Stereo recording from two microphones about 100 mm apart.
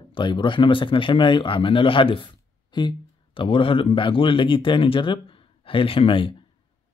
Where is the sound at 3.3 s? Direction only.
65° left (ahead or behind).